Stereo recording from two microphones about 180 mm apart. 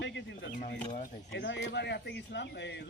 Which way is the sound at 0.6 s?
45° left (ahead or behind).